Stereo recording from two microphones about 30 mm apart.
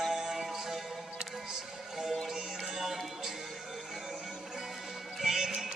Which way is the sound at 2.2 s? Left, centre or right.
Centre.